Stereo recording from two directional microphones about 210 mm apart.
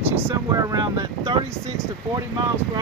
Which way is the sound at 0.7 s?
20° right (ahead or behind).